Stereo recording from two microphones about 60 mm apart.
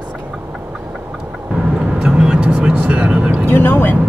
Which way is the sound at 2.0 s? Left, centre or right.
Centre.